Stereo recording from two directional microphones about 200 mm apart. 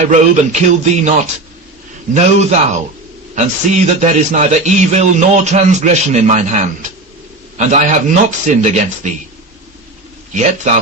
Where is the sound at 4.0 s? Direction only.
35° right (ahead or behind).